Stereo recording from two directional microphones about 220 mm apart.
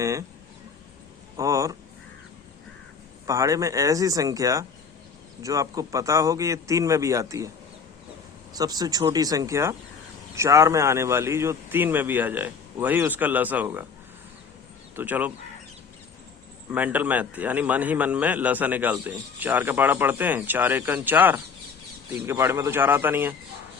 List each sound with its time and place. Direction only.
0.0 s a man's voice: 15° right (ahead or behind)
1.4 s a man's voice: 15° right (ahead or behind)
3.2 s a man's voice: 15° right (ahead or behind)
8.5 s a man's voice: 15° right (ahead or behind)
14.9 s a man's voice: 10° right (ahead or behind)
16.7 s a man's voice: 5° right (ahead or behind)